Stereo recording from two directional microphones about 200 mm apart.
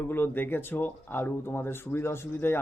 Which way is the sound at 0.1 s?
10° left (ahead or behind).